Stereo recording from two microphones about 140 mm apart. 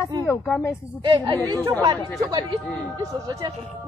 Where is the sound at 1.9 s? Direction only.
35° right (ahead or behind).